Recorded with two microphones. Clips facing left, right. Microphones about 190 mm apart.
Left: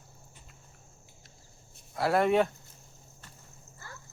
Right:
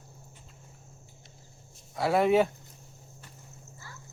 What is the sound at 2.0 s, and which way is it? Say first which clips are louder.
Speech: right 2 dB; centre (ahead or behind).